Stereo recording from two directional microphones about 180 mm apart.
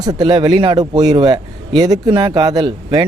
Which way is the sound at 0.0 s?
25° right (ahead or behind).